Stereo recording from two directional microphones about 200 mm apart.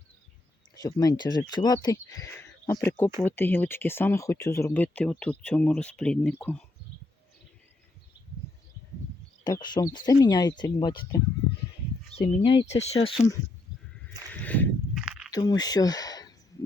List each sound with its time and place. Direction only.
0.8 s speech: 20° left (ahead or behind)
9.4 s speech: 20° left (ahead or behind)
14.4 s walk: 10° left (ahead or behind)
15.3 s speech: 20° left (ahead or behind)